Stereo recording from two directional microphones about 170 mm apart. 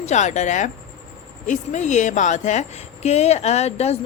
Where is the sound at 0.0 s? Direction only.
45° left (ahead or behind).